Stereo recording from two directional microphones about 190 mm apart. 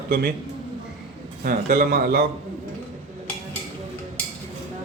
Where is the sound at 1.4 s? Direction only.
50° right (ahead or behind).